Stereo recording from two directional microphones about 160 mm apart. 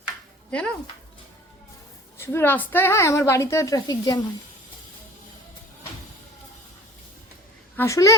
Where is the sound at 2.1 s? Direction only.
15° left (ahead or behind).